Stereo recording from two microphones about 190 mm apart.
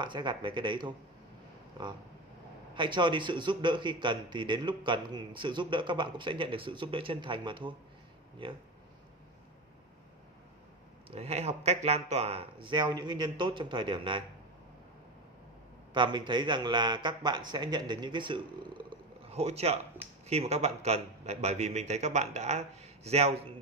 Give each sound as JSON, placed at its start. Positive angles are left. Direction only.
{"t": 0.0, "sound": "a man's voice", "side_deg": -25}
{"t": 2.7, "sound": "a man's voice", "side_deg": -25}
{"t": 11.1, "sound": "a man's voice", "side_deg": -35}
{"t": 15.9, "sound": "a man's voice", "side_deg": -25}
{"t": 18.9, "sound": "a sound", "side_deg": -30}
{"t": 20.2, "sound": "a man's voice", "side_deg": -35}